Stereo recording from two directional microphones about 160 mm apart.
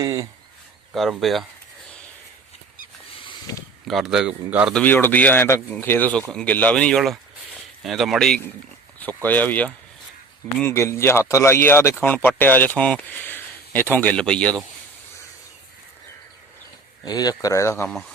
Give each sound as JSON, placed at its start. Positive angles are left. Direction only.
{"t": 0.0, "sound": "speech", "side_deg": -20}
{"t": 0.9, "sound": "speech", "side_deg": 0}
{"t": 3.8, "sound": "speech", "side_deg": 0}
{"t": 4.7, "sound": "speech", "side_deg": 10}
{"t": 17.1, "sound": "speech", "side_deg": 25}